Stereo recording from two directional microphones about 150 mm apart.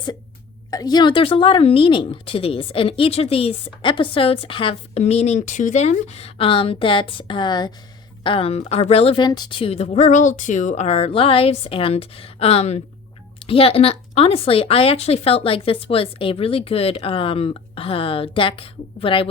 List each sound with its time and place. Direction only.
0.7 s a woman's voice: 25° left (ahead or behind)